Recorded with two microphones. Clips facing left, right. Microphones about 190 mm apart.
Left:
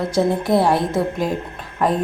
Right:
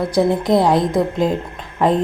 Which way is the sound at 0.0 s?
15° right (ahead or behind).